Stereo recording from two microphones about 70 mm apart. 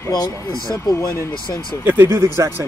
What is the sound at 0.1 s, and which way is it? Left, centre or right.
Speech, left.